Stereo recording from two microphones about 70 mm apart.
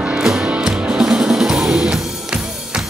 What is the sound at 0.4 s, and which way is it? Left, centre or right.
Music, centre.